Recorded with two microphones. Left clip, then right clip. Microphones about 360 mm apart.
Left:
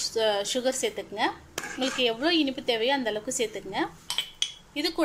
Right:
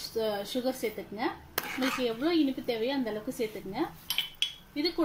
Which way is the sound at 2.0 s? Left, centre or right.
Left.